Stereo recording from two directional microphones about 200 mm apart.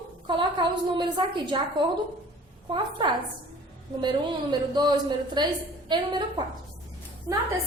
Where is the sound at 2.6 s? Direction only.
25° right (ahead or behind).